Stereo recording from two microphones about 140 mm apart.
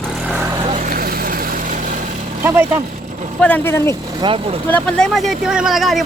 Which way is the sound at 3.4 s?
15° left (ahead or behind).